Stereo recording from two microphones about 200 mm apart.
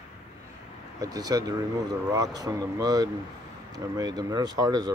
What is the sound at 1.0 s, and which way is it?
Speech, 15° right (ahead or behind).